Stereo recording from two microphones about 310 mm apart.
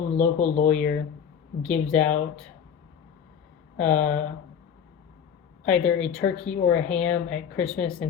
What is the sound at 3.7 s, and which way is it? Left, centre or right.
Speech, centre.